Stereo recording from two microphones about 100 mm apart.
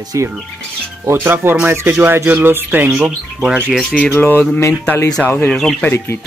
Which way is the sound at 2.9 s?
10° right (ahead or behind).